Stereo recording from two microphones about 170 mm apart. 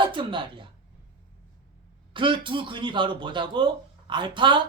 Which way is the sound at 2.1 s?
30° right (ahead or behind).